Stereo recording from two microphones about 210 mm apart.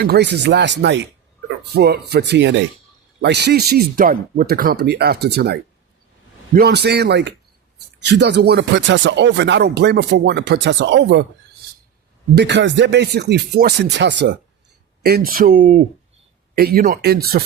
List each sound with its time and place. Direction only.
0.0 s speech: 50° right (ahead or behind)
12.3 s speech: 55° right (ahead or behind)
15.0 s speech: 45° right (ahead or behind)